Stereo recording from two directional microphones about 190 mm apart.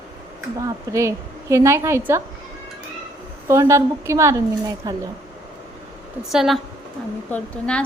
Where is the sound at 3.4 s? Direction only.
15° right (ahead or behind).